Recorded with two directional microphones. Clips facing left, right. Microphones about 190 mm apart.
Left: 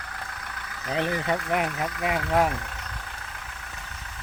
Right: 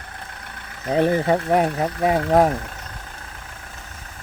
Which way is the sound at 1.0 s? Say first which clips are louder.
Right 8 dB; 35° right (ahead or behind).